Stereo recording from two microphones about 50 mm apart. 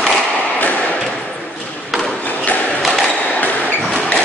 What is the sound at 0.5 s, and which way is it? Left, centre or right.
Thump, left.